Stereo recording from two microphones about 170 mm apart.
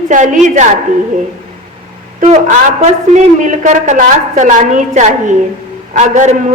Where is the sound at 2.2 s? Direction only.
45° right (ahead or behind).